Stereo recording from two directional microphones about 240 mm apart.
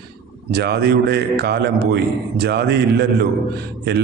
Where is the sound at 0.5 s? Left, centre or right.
Right.